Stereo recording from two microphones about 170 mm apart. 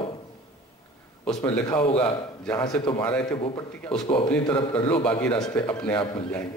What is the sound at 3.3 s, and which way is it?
Speech, 25° left (ahead or behind).